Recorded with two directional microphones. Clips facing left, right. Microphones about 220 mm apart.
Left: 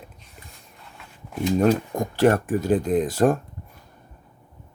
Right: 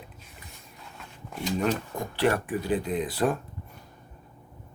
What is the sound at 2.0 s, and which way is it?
Speech, 45° left (ahead or behind).